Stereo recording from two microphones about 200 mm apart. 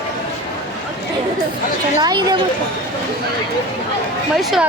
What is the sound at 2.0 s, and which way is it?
Speech, 20° right (ahead or behind).